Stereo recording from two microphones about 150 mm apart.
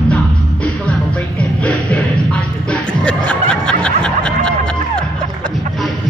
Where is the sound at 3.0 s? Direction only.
5° left (ahead or behind).